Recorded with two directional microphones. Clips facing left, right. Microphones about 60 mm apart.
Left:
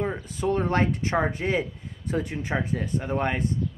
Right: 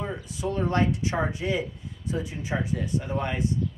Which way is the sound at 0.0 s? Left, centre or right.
Left.